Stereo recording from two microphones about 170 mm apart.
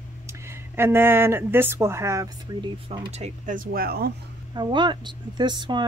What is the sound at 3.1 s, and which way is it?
Speech, 45° right (ahead or behind).